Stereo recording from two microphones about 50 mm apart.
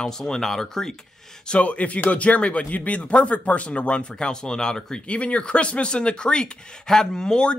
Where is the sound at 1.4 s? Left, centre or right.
Left.